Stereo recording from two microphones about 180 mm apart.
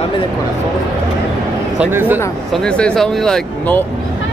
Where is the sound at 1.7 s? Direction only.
10° right (ahead or behind).